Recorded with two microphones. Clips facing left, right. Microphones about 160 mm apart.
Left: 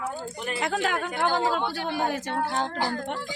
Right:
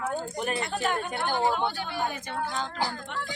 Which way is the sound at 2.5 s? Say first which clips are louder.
Left 4 dB; 65° left (ahead or behind).